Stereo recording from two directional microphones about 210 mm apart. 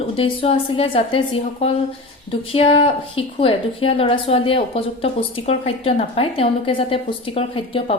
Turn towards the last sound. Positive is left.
turn(degrees=25)  # may be behind; listen again after turning